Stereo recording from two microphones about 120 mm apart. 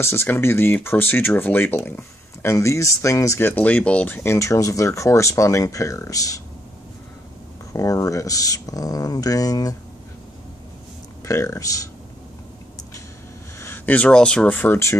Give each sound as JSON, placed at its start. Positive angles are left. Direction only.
{"t": 0.0, "sound": "speech", "side_deg": 20}
{"t": 7.7, "sound": "speech", "side_deg": 30}
{"t": 11.2, "sound": "speech", "side_deg": 25}
{"t": 13.6, "sound": "speech", "side_deg": 15}